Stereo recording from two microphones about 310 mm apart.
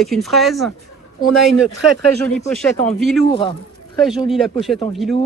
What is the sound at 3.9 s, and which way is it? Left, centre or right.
Speech, centre.